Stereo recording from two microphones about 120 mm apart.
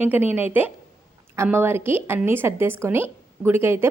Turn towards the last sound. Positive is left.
turn(degrees=-20)  # may be behind; listen again after turning